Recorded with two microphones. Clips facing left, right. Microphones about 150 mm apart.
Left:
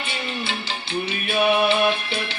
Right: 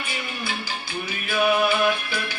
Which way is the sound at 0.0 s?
25° left (ahead or behind).